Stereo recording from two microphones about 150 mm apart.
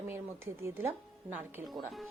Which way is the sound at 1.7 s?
Centre (ahead or behind).